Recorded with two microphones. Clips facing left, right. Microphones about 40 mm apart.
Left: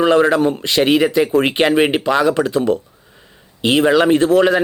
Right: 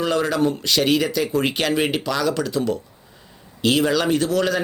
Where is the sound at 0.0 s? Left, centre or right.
Left.